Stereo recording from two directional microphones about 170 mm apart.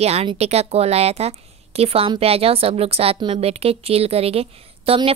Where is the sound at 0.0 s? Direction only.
35° right (ahead or behind).